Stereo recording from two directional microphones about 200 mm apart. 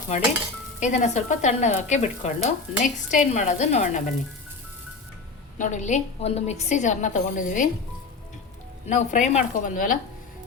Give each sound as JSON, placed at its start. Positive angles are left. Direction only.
{"t": 0.8, "sound": "speech", "side_deg": 35}
{"t": 5.5, "sound": "speech", "side_deg": 40}
{"t": 8.9, "sound": "speech", "side_deg": 35}